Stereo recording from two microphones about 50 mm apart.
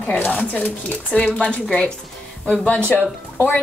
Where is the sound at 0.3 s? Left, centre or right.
Left.